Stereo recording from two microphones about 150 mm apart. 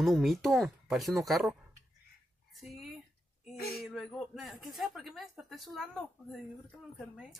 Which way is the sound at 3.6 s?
90° left.